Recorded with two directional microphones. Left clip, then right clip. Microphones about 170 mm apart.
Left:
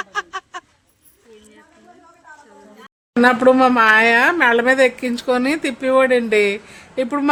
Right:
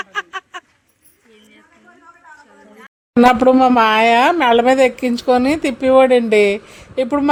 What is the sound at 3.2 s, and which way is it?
Speech, 20° right (ahead or behind).